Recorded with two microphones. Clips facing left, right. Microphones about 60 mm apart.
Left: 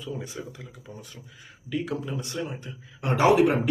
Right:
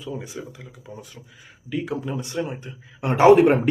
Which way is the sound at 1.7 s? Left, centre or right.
Centre.